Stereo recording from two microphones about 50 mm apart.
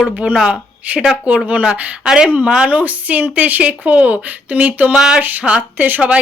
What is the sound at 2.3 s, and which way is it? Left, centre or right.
Speech, right.